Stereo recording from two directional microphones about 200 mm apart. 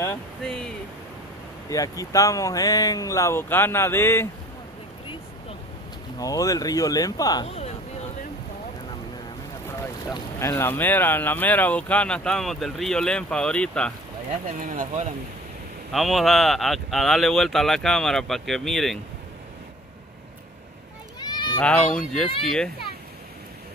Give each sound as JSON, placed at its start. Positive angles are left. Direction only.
{"t": 0.4, "sound": "speech", "side_deg": 5}
{"t": 1.7, "sound": "speech", "side_deg": 15}
{"t": 6.1, "sound": "speech", "side_deg": 15}
{"t": 7.4, "sound": "speech", "side_deg": 30}
{"t": 10.4, "sound": "speech", "side_deg": 10}
{"t": 14.6, "sound": "speech", "side_deg": -40}
{"t": 15.9, "sound": "speech", "side_deg": 0}
{"t": 21.2, "sound": "children playing", "side_deg": 20}
{"t": 21.5, "sound": "speech", "side_deg": 5}